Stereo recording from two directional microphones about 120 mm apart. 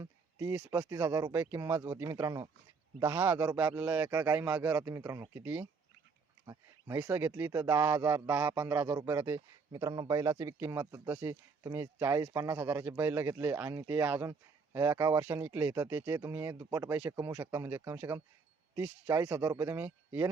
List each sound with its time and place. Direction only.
0.0 s speech: 25° right (ahead or behind)
9.7 s speech: 35° right (ahead or behind); by 20.3 s 20° right (ahead or behind)